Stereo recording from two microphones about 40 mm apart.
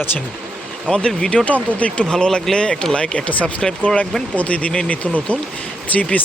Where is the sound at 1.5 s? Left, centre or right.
Left.